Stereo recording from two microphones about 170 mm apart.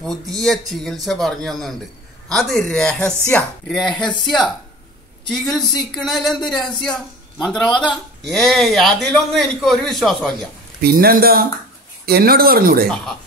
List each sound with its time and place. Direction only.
0.0 s a man's voice: centre (ahead or behind)
10.8 s speech: 65° right (ahead or behind)